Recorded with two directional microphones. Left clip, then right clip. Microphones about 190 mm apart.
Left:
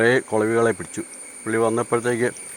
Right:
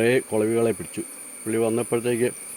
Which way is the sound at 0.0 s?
15° right (ahead or behind).